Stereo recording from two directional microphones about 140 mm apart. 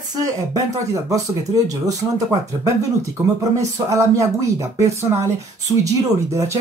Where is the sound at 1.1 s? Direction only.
25° right (ahead or behind).